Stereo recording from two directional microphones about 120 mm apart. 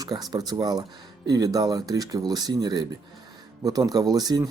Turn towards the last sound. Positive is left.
turn(degrees=-30)  # may be behind; listen again after turning